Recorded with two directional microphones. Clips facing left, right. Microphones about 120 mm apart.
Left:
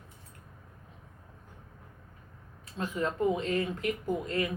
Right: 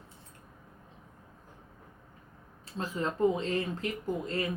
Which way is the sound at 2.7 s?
30° right (ahead or behind).